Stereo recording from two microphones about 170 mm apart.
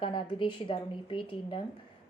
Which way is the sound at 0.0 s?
30° left (ahead or behind).